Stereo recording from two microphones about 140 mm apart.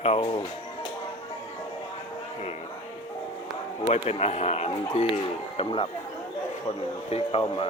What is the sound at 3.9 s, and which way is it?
A man's voice, 50° left (ahead or behind).